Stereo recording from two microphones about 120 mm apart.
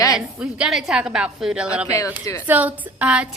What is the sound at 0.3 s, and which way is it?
A woman's voice, 10° right (ahead or behind).